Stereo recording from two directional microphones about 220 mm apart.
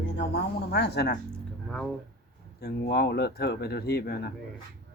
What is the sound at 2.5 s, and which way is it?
Speech, 45° left (ahead or behind).